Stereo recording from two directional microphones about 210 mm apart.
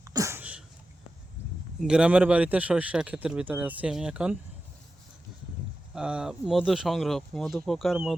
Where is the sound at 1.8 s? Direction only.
5° right (ahead or behind).